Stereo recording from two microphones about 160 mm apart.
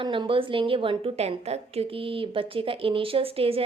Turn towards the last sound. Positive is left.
turn(degrees=-35)  # may be behind; listen again after turning